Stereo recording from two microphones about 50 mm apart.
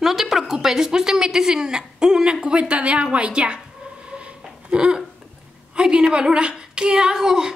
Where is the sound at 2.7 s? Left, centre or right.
Right.